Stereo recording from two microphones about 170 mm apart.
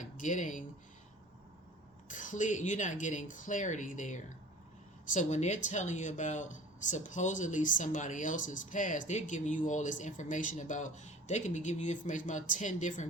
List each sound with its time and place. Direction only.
0.0 s speech: 50° left (ahead or behind)
2.0 s speech: 50° left (ahead or behind)